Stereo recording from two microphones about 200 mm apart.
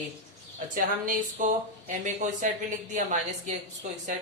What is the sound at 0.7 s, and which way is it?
Speech, 40° right (ahead or behind).